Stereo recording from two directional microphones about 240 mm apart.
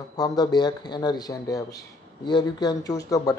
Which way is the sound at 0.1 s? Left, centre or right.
Centre.